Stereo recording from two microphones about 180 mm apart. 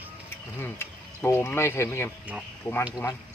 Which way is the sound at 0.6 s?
15° left (ahead or behind).